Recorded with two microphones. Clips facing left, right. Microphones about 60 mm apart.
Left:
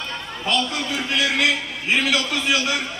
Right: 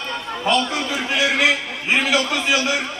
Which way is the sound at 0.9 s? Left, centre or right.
Centre.